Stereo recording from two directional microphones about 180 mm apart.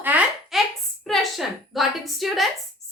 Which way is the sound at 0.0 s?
10° right (ahead or behind).